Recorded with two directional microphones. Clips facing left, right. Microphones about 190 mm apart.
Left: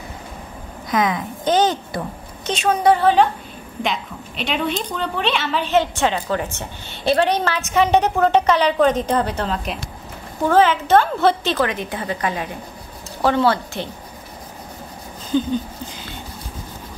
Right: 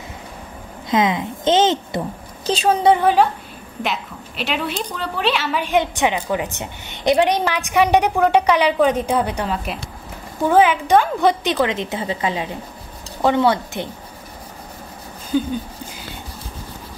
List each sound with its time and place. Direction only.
0.8 s a woman's voice: 25° right (ahead or behind)
2.4 s a woman's voice: 35° right (ahead or behind)
3.0 s a woman's voice: 10° right (ahead or behind)
15.3 s a sound: 10° right (ahead or behind)